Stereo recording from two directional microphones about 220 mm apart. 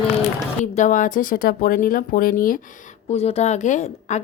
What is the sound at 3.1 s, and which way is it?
Speech, 30° left (ahead or behind).